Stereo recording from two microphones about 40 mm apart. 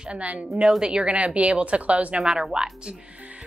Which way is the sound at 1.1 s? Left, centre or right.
Right.